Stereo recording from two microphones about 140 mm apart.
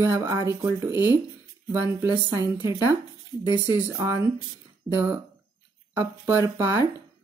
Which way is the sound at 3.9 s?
20° right (ahead or behind).